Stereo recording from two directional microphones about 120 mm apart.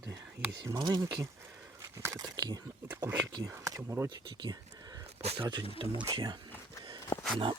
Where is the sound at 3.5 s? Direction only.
25° right (ahead or behind).